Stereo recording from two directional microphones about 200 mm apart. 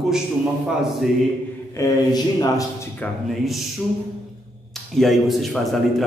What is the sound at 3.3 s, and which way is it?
Speech, centre (ahead or behind).